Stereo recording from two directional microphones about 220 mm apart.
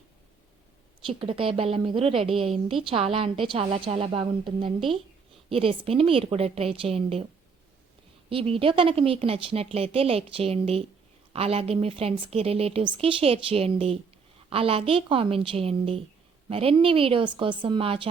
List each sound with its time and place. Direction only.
1.0 s a woman's voice: 25° right (ahead or behind)
8.3 s a woman's voice: 25° right (ahead or behind)